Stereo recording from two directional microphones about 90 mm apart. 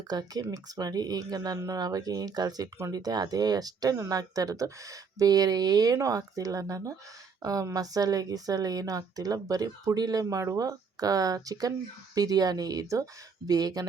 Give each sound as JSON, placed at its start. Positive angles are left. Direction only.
{"t": 0.1, "sound": "a woman's voice", "side_deg": -50}